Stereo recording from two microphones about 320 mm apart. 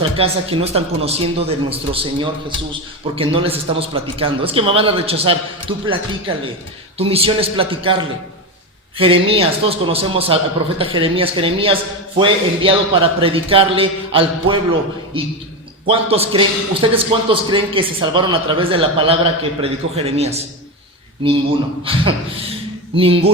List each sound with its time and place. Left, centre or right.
0.0 s a man's voice: centre
15.9 s a man's voice: centre
21.9 s a man's voice: centre